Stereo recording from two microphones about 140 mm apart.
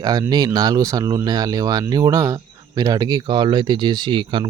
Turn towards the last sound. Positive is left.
turn(degrees=-35)  # may be behind; listen again after turning